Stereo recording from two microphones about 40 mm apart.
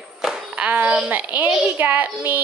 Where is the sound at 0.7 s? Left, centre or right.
Right.